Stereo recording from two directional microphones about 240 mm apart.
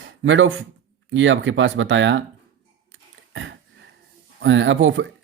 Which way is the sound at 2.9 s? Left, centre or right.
Right.